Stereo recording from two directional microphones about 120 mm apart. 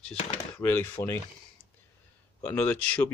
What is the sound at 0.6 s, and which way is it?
Speech, 20° left (ahead or behind).